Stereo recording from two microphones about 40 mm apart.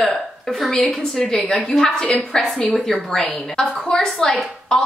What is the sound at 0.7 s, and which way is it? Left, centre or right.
A woman's voice, centre.